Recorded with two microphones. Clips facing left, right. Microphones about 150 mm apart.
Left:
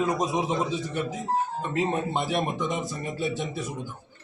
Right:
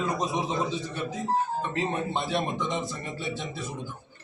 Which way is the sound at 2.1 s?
10° left (ahead or behind).